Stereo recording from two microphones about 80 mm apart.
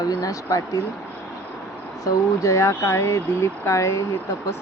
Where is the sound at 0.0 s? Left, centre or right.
Left.